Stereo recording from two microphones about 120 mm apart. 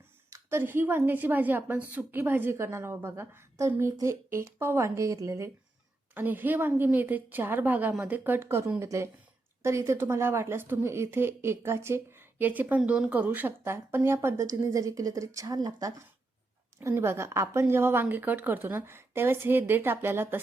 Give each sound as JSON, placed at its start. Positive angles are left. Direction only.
{"t": 0.3, "sound": "a woman's voice", "side_deg": -20}
{"t": 6.1, "sound": "a woman's voice", "side_deg": -15}